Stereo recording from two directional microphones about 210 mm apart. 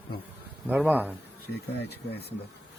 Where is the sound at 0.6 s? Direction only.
10° right (ahead or behind).